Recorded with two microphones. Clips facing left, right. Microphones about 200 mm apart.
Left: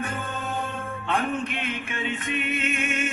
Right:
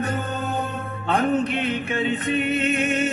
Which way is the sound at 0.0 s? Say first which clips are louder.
Right 5 dB; 40° right (ahead or behind).